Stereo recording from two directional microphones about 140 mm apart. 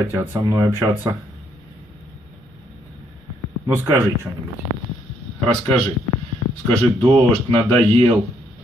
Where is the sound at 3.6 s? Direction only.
20° right (ahead or behind).